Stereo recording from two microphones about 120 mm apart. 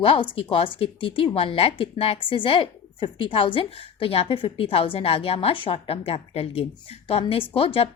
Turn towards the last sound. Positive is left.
turn(degrees=50)  # may be behind; listen again after turning